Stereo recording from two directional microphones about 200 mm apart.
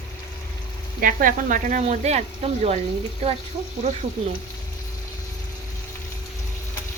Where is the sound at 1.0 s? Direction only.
45° right (ahead or behind).